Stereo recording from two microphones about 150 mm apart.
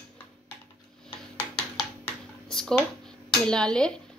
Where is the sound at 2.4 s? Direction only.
5° left (ahead or behind).